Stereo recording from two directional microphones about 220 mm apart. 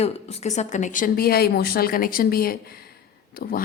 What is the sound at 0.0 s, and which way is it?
Speech, 30° left (ahead or behind).